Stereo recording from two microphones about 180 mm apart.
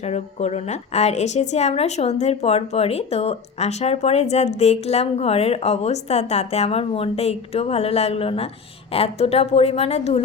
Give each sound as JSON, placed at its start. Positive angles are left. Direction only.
{"t": 0.0, "sound": "a woman's voice", "side_deg": 35}